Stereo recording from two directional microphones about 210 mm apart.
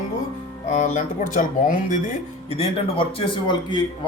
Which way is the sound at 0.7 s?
35° left (ahead or behind).